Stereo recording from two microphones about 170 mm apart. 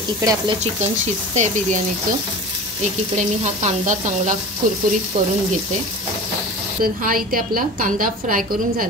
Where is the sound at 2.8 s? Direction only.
45° right (ahead or behind).